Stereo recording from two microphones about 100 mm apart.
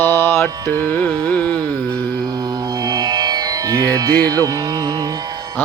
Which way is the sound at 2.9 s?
45° right (ahead or behind).